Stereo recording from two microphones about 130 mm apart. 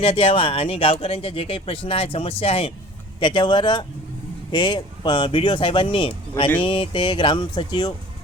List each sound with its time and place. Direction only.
0.0 s speech: 45° left (ahead or behind)